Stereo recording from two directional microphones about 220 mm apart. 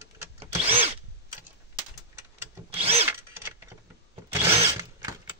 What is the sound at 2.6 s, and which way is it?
Drill, 25° right (ahead or behind).